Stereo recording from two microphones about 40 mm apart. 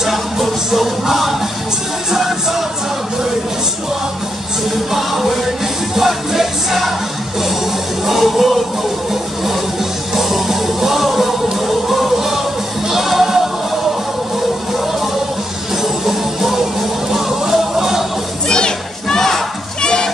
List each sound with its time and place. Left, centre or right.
0.0 s music: centre
4.9 s music: centre
8.0 s music: centre
15.8 s music: centre
18.5 s crowd: centre
19.8 s children playing: centre